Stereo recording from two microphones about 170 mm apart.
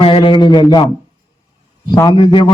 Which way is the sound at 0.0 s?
30° left (ahead or behind).